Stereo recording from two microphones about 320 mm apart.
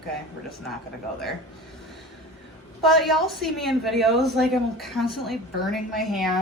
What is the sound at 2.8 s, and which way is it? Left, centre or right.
Speech, centre.